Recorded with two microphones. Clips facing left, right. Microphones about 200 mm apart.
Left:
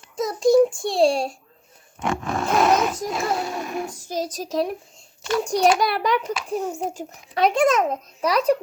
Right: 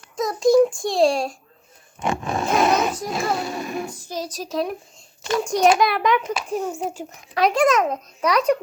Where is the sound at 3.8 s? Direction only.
50° left (ahead or behind).